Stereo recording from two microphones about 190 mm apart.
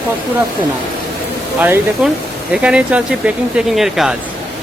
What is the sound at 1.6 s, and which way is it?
Speech, 10° right (ahead or behind).